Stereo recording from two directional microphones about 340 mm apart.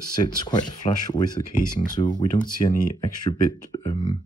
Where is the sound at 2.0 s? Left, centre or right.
Left.